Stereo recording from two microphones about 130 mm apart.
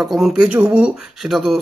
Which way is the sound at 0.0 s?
Centre (ahead or behind).